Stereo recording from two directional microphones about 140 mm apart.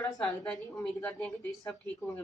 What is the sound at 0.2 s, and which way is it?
A woman's voice, 10° left (ahead or behind).